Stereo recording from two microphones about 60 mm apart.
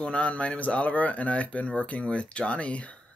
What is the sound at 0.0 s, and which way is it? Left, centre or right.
Speech, left.